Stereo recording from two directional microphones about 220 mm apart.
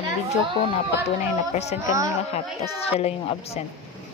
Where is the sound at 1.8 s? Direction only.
15° right (ahead or behind).